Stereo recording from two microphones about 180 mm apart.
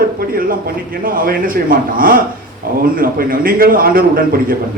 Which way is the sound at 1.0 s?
55° right (ahead or behind).